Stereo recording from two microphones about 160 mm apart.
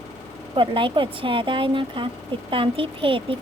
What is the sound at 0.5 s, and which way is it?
A woman's voice, 30° right (ahead or behind).